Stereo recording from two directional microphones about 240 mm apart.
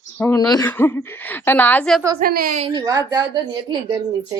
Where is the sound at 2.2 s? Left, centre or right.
Right.